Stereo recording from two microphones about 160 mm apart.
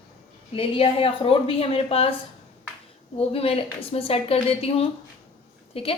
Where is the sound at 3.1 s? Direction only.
40° left (ahead or behind).